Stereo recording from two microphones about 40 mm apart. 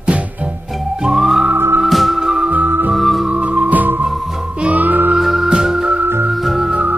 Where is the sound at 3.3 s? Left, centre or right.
Right.